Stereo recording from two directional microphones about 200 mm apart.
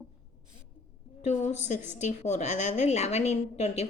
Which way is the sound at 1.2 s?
35° left (ahead or behind).